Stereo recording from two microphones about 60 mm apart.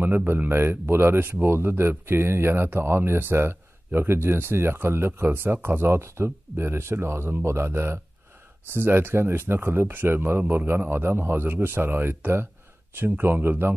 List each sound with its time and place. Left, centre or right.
0.0 s speech: right